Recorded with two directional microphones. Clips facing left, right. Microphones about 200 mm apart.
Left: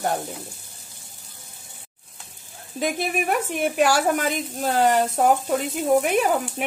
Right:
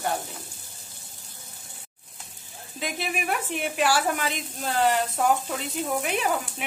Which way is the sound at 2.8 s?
45° left (ahead or behind).